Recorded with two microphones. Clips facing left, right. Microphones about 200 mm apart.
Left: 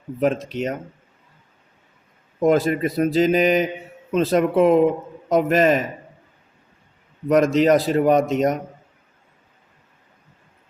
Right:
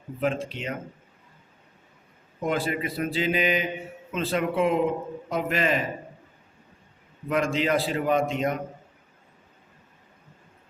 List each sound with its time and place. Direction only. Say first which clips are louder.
0.2 s speech: left 7 dB; 40° left (ahead or behind)
2.4 s speech: left 9 dB; 40° left (ahead or behind)
7.3 s speech: left 9 dB; 40° left (ahead or behind)